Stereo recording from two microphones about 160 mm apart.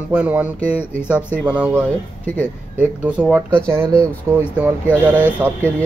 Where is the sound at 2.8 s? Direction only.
10° right (ahead or behind).